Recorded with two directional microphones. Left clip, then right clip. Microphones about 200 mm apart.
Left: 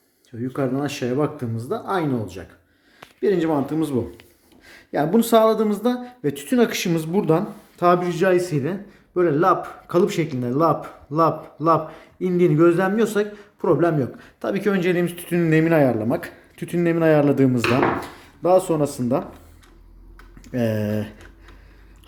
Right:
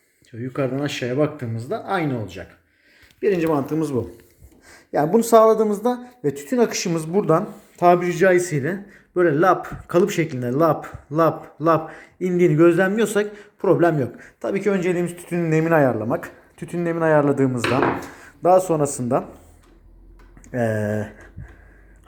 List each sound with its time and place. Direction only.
0.3 s speech: 5° right (ahead or behind)
7.0 s speech: 25° left (ahead or behind)
7.8 s speech: centre (ahead or behind)
14.5 s speech: 10° left (ahead or behind); by 17.6 s 35° left (ahead or behind)
18.2 s a sound: centre (ahead or behind)
18.8 s speech: 5° left (ahead or behind)
20.4 s speech: 25° left (ahead or behind)